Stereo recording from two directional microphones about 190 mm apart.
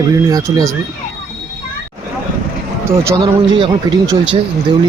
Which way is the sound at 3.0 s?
20° right (ahead or behind).